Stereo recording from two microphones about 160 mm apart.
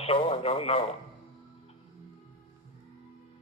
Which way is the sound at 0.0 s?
35° left (ahead or behind).